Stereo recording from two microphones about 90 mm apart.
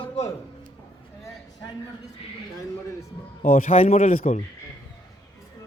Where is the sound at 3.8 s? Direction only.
90° left.